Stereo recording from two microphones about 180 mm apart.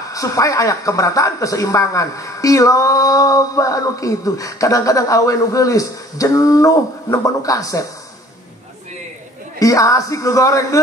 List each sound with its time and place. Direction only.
0.1 s speech: 20° left (ahead or behind)
9.6 s speech: 20° left (ahead or behind)